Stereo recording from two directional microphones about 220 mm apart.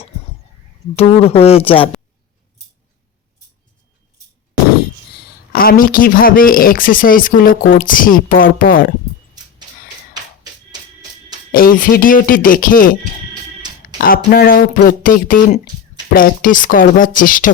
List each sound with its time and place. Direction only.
0.9 s speech: 25° left (ahead or behind)
5.5 s speech: 40° left (ahead or behind)
11.5 s speech: 40° left (ahead or behind)
14.3 s speech: 40° left (ahead or behind)